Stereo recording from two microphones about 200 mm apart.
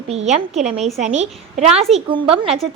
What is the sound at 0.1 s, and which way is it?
A woman's voice, 30° right (ahead or behind).